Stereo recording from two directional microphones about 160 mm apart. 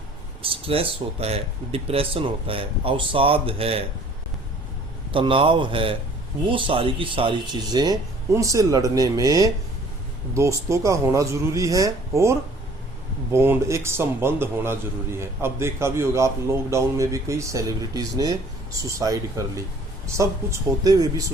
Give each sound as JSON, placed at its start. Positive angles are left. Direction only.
{"t": 0.4, "sound": "speech", "side_deg": -35}
{"t": 5.1, "sound": "a man's voice", "side_deg": -35}